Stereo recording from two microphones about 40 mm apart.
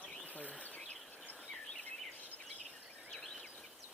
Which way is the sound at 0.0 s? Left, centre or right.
Left.